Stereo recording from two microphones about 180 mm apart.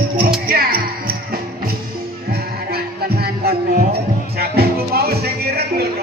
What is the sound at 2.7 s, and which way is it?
Music, 60° right (ahead or behind).